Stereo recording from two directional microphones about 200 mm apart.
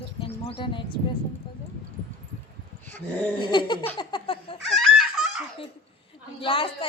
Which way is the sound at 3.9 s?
25° left (ahead or behind).